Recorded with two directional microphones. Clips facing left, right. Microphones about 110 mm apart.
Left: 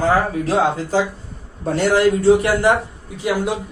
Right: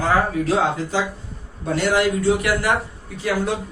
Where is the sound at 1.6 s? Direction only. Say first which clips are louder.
Left 4 dB; 35° left (ahead or behind).